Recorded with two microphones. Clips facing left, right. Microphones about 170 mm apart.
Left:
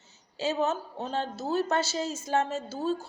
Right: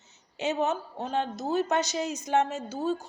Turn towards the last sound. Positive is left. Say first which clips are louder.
# even
turn(degrees=-15)  # may be behind; listen again after turning